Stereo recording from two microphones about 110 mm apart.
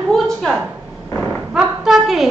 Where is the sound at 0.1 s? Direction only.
Centre (ahead or behind).